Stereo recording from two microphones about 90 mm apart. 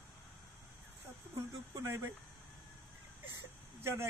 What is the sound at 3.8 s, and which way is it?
Speech, 30° right (ahead or behind).